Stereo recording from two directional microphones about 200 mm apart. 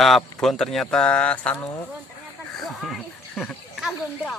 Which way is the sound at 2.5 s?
Centre (ahead or behind).